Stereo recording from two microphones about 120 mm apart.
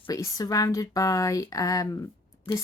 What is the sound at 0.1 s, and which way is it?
Speech, 25° left (ahead or behind).